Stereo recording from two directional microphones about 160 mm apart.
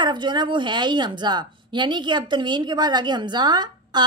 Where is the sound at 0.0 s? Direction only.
30° right (ahead or behind).